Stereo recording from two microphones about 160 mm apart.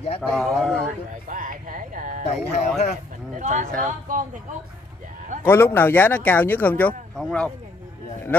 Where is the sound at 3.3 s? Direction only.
50° right (ahead or behind).